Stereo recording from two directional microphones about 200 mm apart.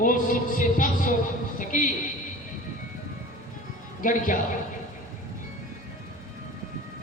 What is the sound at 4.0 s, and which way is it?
Speech, 40° left (ahead or behind).